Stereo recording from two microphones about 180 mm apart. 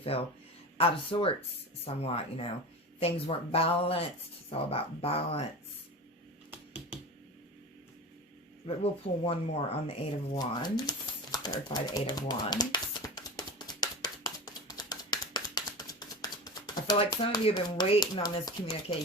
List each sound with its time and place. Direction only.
0.0 s speech: 35° left (ahead or behind)
8.6 s speech: 30° left (ahead or behind)
10.3 s typing: 25° left (ahead or behind)